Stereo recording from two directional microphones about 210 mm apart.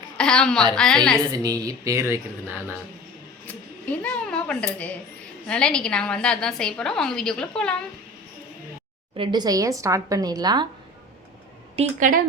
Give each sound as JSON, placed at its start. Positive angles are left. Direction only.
{"t": 0.2, "sound": "a woman's voice", "side_deg": 5}
{"t": 1.3, "sound": "a woman's voice", "side_deg": -15}
{"t": 3.4, "sound": "a woman's voice", "side_deg": 5}
{"t": 9.1, "sound": "a woman's voice", "side_deg": -20}
{"t": 11.8, "sound": "a woman's voice", "side_deg": -35}